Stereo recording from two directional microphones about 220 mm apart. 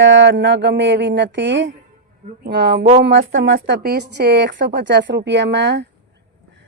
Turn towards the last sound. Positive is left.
turn(degrees=-50)  # may be behind; listen again after turning